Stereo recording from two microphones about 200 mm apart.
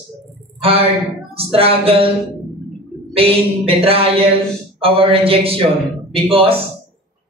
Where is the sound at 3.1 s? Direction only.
30° right (ahead or behind).